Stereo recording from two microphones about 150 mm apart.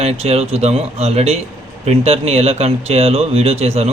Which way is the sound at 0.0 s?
45° right (ahead or behind).